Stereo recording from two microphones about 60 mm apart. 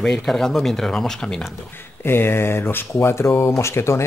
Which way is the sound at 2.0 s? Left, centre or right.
Left.